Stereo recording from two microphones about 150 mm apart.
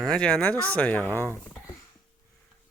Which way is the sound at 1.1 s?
15° left (ahead or behind).